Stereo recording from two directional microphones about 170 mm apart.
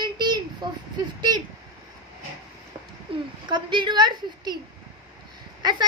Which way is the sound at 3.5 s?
25° right (ahead or behind).